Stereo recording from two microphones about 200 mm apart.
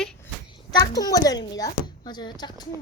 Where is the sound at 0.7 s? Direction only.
20° left (ahead or behind).